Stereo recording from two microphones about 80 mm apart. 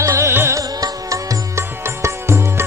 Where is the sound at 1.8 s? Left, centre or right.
Right.